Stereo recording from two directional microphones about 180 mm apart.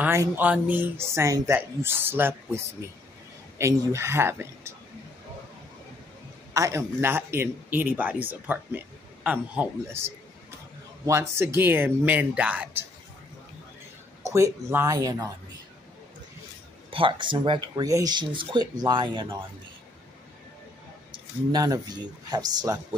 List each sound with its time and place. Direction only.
0.0 s speech: 10° right (ahead or behind)
6.5 s speech: 15° right (ahead or behind)
14.2 s speech: 15° right (ahead or behind)
16.9 s speech: 30° right (ahead or behind)
21.1 s speech: 25° right (ahead or behind)